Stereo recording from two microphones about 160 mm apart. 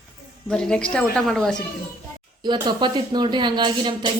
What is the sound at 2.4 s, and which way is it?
Speech, 25° right (ahead or behind).